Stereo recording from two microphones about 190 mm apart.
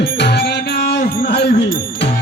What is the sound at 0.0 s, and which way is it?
Music, 55° left (ahead or behind).